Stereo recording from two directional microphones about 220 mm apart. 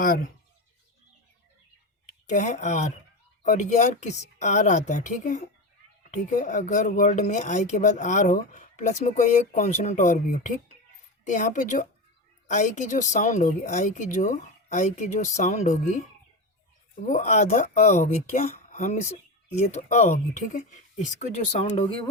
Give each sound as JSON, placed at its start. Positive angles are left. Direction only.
{"t": 0.0, "sound": "speech", "side_deg": 40}
{"t": 2.3, "sound": "speech", "side_deg": 35}
{"t": 17.0, "sound": "speech", "side_deg": 35}